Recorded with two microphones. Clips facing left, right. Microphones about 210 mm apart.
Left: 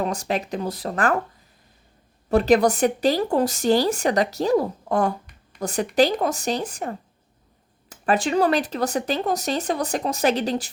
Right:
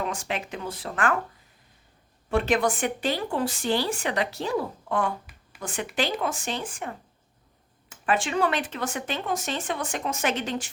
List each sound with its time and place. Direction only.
0.0 s speech: 40° left (ahead or behind)
2.3 s speech: 40° left (ahead or behind)